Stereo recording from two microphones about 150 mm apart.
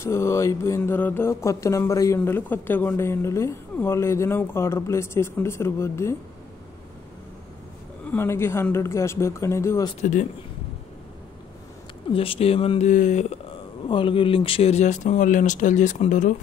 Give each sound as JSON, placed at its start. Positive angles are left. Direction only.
{"t": 0.0, "sound": "mantra", "side_deg": 20}
{"t": 8.1, "sound": "mantra", "side_deg": 15}
{"t": 9.9, "sound": "speech", "side_deg": 55}
{"t": 12.1, "sound": "speech", "side_deg": 40}
{"t": 12.8, "sound": "speech", "side_deg": 55}
{"t": 13.8, "sound": "speech", "side_deg": 35}